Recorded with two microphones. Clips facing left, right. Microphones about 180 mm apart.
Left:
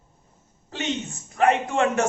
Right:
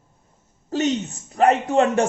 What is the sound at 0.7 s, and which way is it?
A man's voice, 40° right (ahead or behind).